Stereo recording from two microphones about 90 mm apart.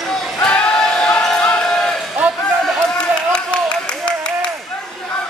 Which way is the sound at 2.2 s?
15° right (ahead or behind).